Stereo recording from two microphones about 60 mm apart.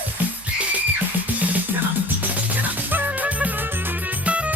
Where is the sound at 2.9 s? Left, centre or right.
Right.